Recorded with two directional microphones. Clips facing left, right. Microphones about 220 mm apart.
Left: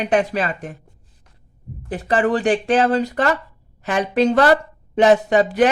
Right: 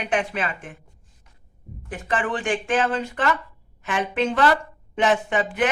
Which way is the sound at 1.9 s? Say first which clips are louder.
Left 7 dB; 35° left (ahead or behind).